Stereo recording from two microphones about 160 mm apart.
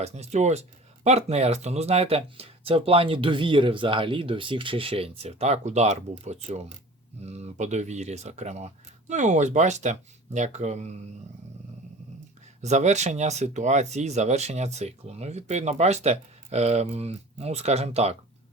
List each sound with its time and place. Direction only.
0.0 s speech: 45° right (ahead or behind)
12.6 s speech: 45° right (ahead or behind)